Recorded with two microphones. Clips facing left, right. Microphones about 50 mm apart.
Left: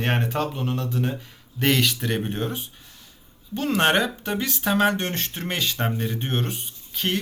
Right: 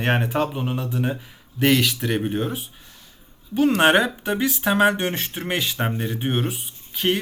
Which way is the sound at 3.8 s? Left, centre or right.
Centre.